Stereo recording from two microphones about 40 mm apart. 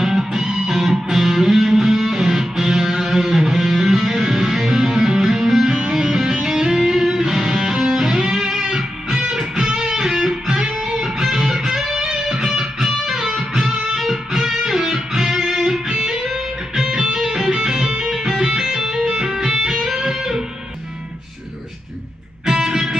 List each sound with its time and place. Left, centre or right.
0.0 s music: centre
5.6 s music: centre
22.4 s music: centre